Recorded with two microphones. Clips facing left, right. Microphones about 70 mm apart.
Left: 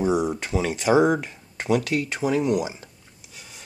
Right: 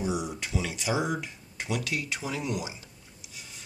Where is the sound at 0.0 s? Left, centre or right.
Left.